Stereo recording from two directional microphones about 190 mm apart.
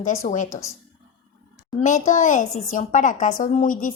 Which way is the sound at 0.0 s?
40° left (ahead or behind).